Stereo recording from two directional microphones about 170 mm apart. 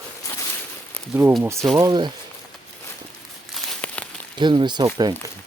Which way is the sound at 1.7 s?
25° right (ahead or behind).